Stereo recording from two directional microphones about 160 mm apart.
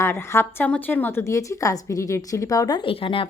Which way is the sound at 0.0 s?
15° left (ahead or behind).